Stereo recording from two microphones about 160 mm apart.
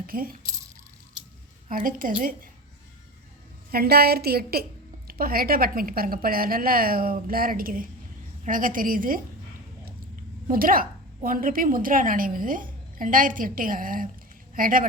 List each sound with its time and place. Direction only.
0.1 s a woman's voice: 60° right (ahead or behind)
1.6 s a woman's voice: 60° right (ahead or behind)
3.7 s a woman's voice: 75° right (ahead or behind); by 9.2 s 60° right (ahead or behind)
10.5 s a woman's voice: 60° right (ahead or behind)